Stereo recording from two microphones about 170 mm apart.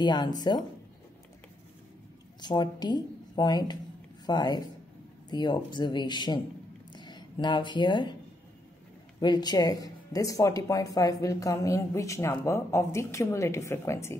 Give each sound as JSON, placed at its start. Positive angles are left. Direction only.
{"t": 0.0, "sound": "speech", "side_deg": 25}
{"t": 2.4, "sound": "speech", "side_deg": 25}
{"t": 6.9, "sound": "a sound", "side_deg": 25}
{"t": 9.2, "sound": "speech", "side_deg": 25}